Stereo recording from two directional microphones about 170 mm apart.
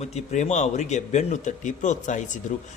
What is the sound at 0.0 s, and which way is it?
A man's voice, 40° left (ahead or behind).